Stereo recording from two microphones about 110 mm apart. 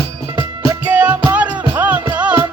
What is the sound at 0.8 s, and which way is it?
Music, 15° right (ahead or behind).